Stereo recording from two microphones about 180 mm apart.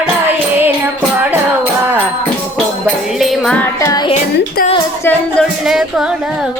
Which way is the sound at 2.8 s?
Centre (ahead or behind).